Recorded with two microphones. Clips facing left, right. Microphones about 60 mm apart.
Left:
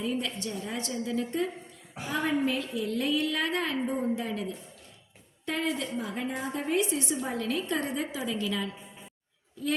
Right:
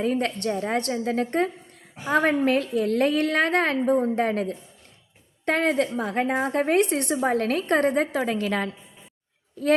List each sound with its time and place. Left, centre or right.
0.0 s a woman's voice: right